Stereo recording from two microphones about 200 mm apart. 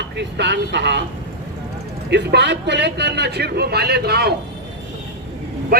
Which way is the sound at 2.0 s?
55° right (ahead or behind).